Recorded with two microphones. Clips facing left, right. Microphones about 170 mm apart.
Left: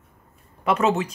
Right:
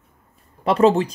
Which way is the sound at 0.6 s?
30° right (ahead or behind).